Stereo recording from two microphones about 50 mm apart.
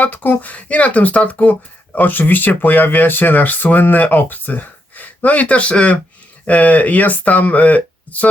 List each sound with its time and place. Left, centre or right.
0.0 s speech: left